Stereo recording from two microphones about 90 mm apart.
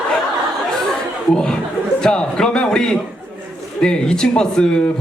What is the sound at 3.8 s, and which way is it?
Speech, 10° left (ahead or behind).